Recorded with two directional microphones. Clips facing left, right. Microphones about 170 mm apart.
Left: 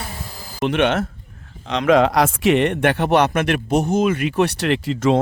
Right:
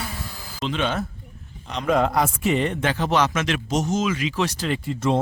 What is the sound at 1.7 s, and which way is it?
A man's voice, 90° left.